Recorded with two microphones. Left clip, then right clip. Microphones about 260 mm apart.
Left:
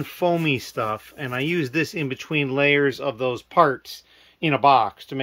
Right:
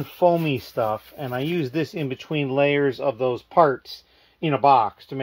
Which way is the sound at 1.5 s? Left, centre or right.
Left.